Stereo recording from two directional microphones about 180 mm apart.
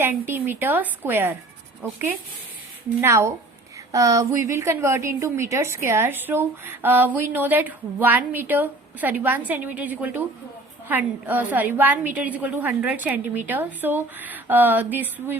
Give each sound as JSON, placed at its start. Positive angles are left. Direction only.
{"t": 0.0, "sound": "a woman's voice", "side_deg": -10}